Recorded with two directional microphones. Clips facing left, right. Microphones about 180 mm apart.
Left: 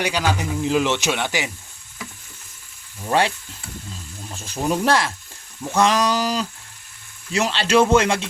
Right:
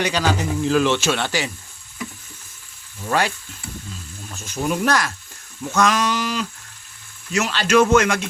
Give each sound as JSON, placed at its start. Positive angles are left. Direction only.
{"t": 0.0, "sound": "speech", "side_deg": 10}
{"t": 3.1, "sound": "a man's voice", "side_deg": 25}
{"t": 5.6, "sound": "a sound", "side_deg": 30}
{"t": 7.3, "sound": "a man's voice", "side_deg": 30}